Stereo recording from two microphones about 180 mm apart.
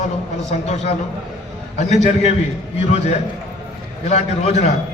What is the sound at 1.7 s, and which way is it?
A man's voice, 40° left (ahead or behind).